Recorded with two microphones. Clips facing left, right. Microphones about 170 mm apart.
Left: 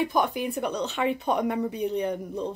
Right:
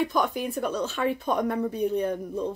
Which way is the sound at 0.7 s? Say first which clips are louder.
Even; 15° left (ahead or behind).